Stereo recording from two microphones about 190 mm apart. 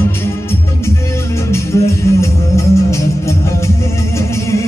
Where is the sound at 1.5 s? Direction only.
15° left (ahead or behind).